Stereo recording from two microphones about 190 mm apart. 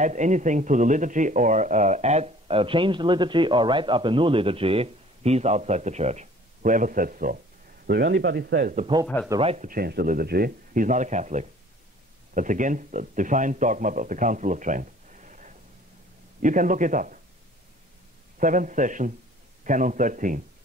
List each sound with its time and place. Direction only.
0.0 s a man's voice: 40° right (ahead or behind)
7.8 s speech: 60° right (ahead or behind)
8.7 s speech: 25° right (ahead or behind)
9.0 s speech: 5° left (ahead or behind)
9.4 s a man's voice: 30° right (ahead or behind)
9.7 s a man's voice: 55° right (ahead or behind)
18.4 s speech: 45° right (ahead or behind)